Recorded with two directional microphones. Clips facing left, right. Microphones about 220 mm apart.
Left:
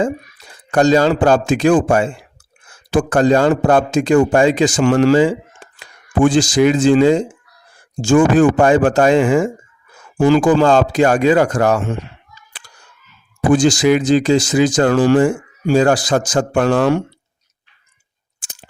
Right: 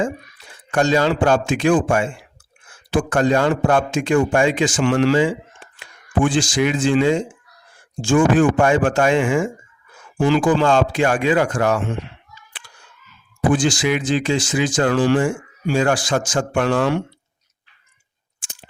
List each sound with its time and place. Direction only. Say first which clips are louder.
0.5 s speech: left 5 dB; 40° left (ahead or behind)
13.5 s speech: left 6 dB; 40° left (ahead or behind)